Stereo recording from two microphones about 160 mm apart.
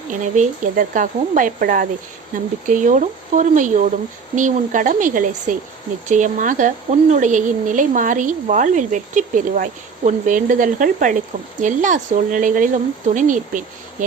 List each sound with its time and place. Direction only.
0.1 s a woman's voice: 50° right (ahead or behind)